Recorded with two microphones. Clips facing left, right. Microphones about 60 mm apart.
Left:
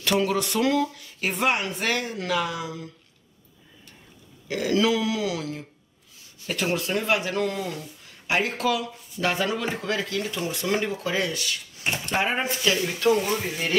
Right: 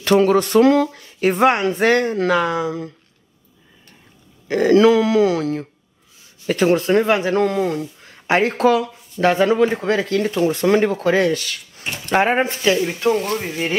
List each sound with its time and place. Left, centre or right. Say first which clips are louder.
0.0 s speech: right 9 dB; right
1.6 s speech: right 11 dB; right
4.5 s speech: right 10 dB; right
11.8 s speech: left 1 dB; centre
12.1 s speech: right 10 dB; right
13.1 s speech: right 1 dB; centre